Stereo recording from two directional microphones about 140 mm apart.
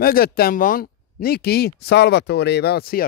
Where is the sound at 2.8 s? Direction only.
90° left.